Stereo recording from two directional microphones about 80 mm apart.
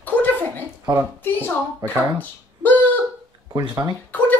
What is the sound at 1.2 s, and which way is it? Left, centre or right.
Speech, left.